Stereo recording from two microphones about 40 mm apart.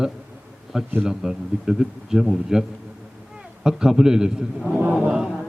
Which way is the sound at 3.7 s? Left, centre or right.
Centre.